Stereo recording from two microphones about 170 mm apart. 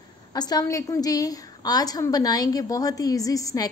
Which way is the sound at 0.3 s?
25° left (ahead or behind).